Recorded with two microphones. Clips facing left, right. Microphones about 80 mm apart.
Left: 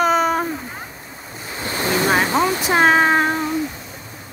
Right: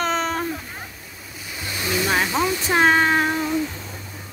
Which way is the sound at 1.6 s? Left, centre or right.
Left.